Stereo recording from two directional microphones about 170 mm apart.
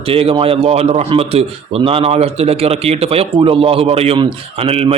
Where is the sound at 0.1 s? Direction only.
35° right (ahead or behind).